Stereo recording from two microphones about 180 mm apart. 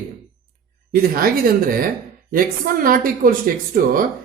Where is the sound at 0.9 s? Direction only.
55° right (ahead or behind).